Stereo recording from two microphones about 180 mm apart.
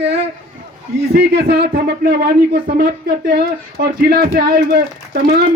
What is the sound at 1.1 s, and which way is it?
Speech, 65° right (ahead or behind).